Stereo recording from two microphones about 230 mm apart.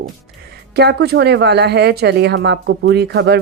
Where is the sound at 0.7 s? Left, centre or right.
Right.